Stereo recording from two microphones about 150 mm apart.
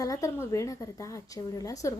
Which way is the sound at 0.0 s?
20° left (ahead or behind).